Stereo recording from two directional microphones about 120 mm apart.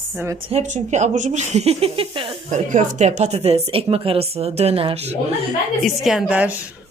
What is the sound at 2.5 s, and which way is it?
A woman's voice, 90° right.